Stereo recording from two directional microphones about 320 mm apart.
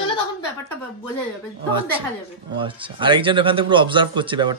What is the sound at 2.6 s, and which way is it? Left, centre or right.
A man's voice, centre.